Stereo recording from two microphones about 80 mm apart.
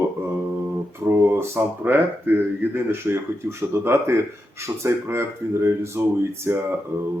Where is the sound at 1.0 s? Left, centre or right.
Right.